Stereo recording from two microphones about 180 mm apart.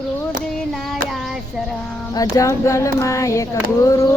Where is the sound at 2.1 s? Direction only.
20° left (ahead or behind).